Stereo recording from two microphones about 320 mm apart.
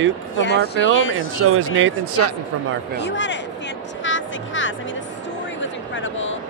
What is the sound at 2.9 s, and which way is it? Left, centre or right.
Speech, left.